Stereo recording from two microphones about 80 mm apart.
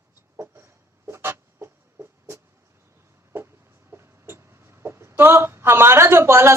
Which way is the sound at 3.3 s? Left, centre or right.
Right.